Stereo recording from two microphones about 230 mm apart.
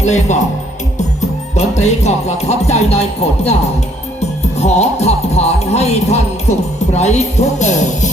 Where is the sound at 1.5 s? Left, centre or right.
Left.